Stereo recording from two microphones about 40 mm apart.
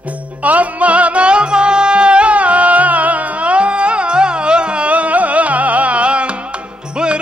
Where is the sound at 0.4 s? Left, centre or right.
Right.